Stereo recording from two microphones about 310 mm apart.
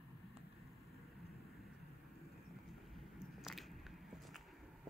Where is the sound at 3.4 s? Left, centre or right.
Centre.